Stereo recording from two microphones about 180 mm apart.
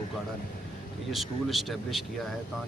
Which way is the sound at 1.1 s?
Centre (ahead or behind).